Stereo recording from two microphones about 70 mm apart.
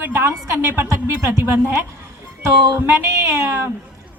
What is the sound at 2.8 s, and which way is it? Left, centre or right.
Speech, right.